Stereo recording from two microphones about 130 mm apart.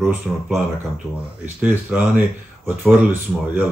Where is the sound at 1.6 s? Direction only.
10° right (ahead or behind).